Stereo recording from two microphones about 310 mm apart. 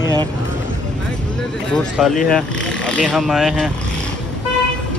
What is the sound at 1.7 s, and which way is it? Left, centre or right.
Speech, centre.